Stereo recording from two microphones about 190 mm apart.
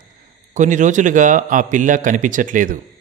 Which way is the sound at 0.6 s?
40° right (ahead or behind).